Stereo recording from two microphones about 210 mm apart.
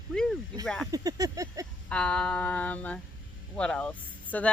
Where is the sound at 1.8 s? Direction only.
5° left (ahead or behind).